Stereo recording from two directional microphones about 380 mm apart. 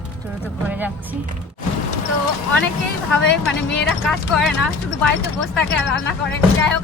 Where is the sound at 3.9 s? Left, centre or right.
Centre.